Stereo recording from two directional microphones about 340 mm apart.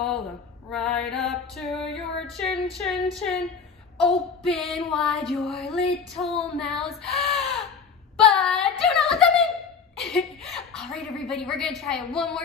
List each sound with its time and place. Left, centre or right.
0.0 s female singing: centre
6.6 s speech: centre
8.2 s a sound: centre